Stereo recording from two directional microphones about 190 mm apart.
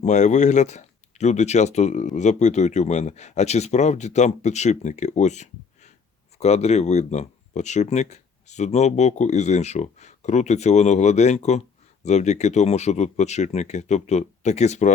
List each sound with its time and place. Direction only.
0.0 s speech: 40° left (ahead or behind)